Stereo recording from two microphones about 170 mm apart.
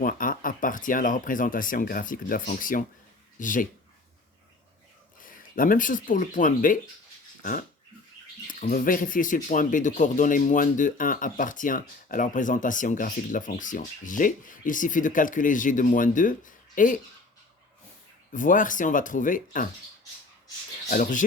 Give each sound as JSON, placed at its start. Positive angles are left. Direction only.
{"t": 0.0, "sound": "speech", "side_deg": 55}
{"t": 5.2, "sound": "speech", "side_deg": 55}
{"t": 8.4, "sound": "speech", "side_deg": 55}
{"t": 18.3, "sound": "speech", "side_deg": 50}
{"t": 20.9, "sound": "speech", "side_deg": 50}